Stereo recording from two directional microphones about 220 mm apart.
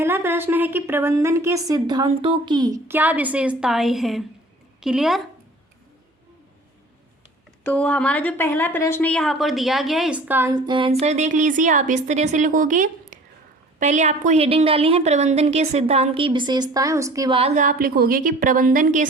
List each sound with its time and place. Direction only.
0.0 s a woman's voice: 10° right (ahead or behind)
7.6 s a woman's voice: 5° left (ahead or behind); by 19.0 s 35° right (ahead or behind)